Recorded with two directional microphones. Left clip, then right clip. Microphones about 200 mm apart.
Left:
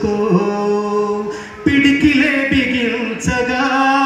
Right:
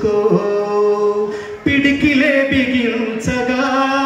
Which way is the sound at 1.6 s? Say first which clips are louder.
Left 2 dB; 30° right (ahead or behind).